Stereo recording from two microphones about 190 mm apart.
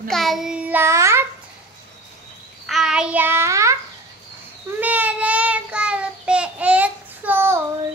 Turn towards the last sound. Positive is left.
turn(degrees=-10)  # may be behind; listen again after turning